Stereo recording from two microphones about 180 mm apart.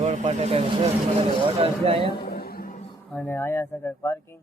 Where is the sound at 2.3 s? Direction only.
55° left (ahead or behind).